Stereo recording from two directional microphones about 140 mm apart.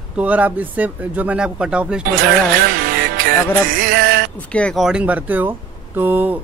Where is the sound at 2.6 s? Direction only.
90° right.